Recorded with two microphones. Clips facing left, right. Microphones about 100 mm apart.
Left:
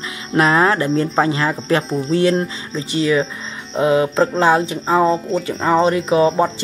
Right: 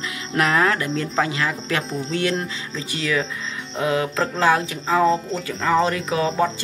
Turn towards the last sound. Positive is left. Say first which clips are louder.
# left 6 dB
turn(degrees=25)  # may be behind; listen again after turning